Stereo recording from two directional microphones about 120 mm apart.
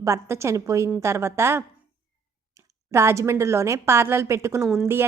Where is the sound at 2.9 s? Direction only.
25° right (ahead or behind).